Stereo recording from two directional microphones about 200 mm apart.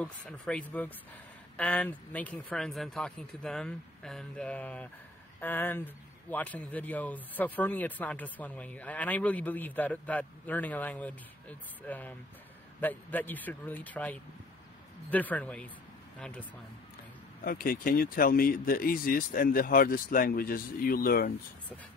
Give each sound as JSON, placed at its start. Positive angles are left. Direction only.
{"t": 0.0, "sound": "speech", "side_deg": 5}
{"t": 17.4, "sound": "speech", "side_deg": 45}